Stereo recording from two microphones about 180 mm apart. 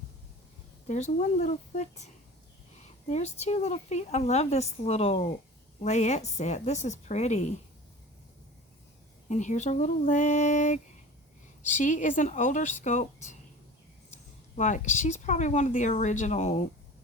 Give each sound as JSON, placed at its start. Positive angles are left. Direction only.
{"t": 0.9, "sound": "speech", "side_deg": 40}
{"t": 3.1, "sound": "speech", "side_deg": 40}
{"t": 9.3, "sound": "speech", "side_deg": 40}
{"t": 14.5, "sound": "speech", "side_deg": 45}